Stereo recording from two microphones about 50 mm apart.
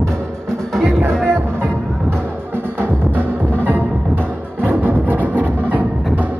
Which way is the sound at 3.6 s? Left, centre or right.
Right.